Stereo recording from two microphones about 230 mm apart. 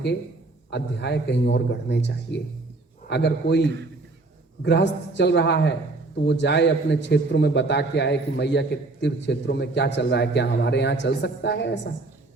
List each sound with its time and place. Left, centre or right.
0.7 s a man's voice: left